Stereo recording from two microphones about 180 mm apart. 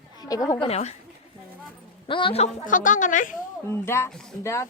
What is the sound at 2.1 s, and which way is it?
A woman's voice, 30° left (ahead or behind).